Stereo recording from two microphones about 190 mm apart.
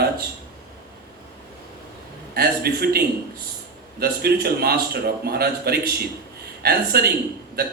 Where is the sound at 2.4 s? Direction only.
55° right (ahead or behind).